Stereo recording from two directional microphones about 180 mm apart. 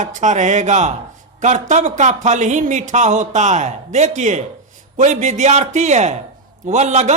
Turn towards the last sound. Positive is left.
turn(degrees=-40)  # may be behind; listen again after turning